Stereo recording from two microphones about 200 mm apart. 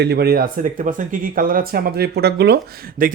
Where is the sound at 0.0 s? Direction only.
55° right (ahead or behind).